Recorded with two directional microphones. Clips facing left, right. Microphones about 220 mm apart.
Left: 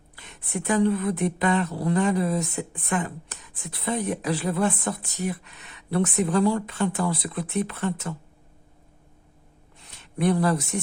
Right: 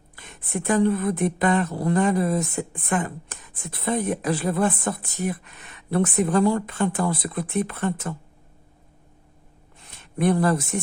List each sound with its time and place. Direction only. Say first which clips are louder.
0.2 s a woman's voice: right 2 dB; 50° right (ahead or behind)
9.9 s speech: right 2 dB; 50° right (ahead or behind)